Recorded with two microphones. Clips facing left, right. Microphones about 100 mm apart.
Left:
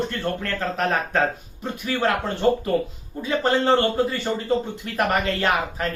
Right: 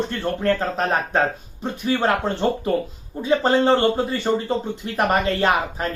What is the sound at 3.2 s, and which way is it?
Speech, 25° right (ahead or behind).